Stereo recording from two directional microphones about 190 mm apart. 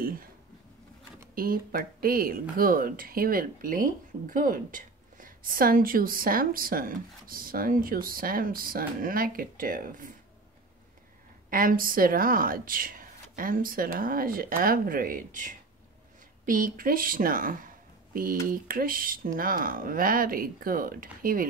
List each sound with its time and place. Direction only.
0.0 s a sound: 50° right (ahead or behind)
1.3 s speech: 50° right (ahead or behind)
11.5 s speech: 50° right (ahead or behind)